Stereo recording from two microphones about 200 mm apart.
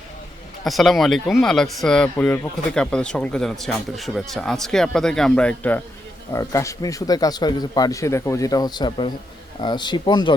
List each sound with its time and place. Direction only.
0.6 s speech: centre (ahead or behind); by 10.3 s 20° left (ahead or behind)